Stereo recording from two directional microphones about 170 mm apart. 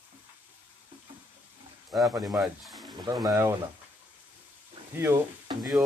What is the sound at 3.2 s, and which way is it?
Speech, 15° right (ahead or behind).